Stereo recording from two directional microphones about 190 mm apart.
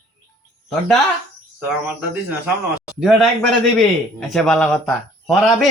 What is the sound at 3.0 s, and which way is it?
Speech, centre (ahead or behind).